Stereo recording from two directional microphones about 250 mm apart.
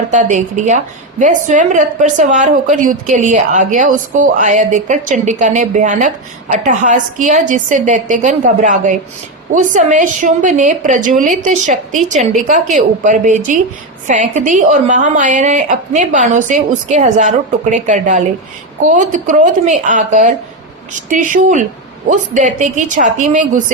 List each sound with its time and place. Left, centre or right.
0.1 s a woman's voice: right